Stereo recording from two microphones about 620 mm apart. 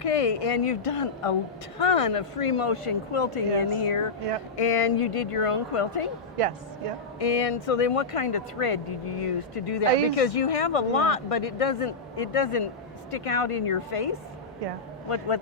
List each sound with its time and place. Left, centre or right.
0.0 s speech: left
7.2 s speech: left